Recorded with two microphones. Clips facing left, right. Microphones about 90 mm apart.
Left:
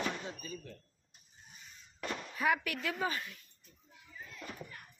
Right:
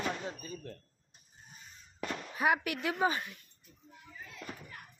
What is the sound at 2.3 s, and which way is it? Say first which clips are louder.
Speech: right 3 dB; 20° right (ahead or behind).